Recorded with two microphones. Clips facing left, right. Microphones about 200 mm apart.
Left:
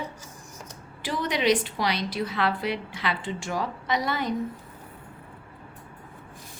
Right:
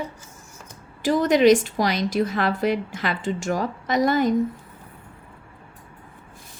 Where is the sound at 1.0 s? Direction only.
45° right (ahead or behind).